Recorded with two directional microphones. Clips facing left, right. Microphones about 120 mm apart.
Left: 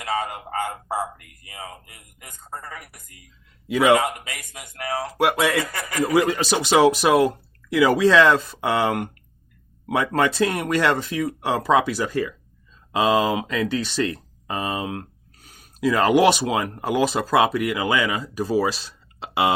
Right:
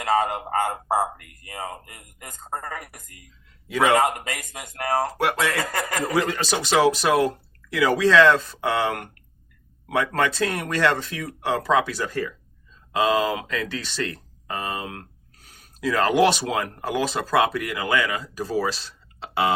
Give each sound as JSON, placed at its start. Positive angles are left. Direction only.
{"t": 0.0, "sound": "a sound", "side_deg": -45}
{"t": 3.9, "sound": "speech", "side_deg": -45}
{"t": 5.1, "sound": "speech", "side_deg": 10}
{"t": 5.6, "sound": "speech", "side_deg": -45}
{"t": 6.1, "sound": "speech", "side_deg": 10}